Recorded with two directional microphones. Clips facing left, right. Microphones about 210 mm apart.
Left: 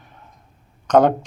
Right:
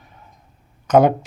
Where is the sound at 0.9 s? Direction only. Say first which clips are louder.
Right 1 dB; 10° right (ahead or behind).